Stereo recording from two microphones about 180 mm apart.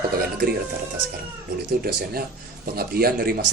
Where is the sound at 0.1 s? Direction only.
60° right (ahead or behind).